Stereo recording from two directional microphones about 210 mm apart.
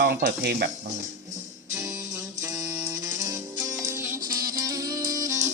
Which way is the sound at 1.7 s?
15° right (ahead or behind).